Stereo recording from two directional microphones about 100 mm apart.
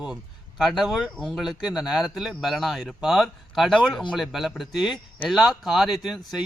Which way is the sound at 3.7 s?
10° left (ahead or behind).